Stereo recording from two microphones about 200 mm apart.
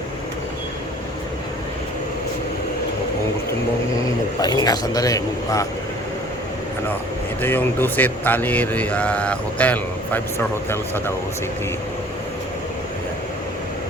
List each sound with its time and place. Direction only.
4.4 s speech: 20° left (ahead or behind)
7.4 s speech: 10° left (ahead or behind)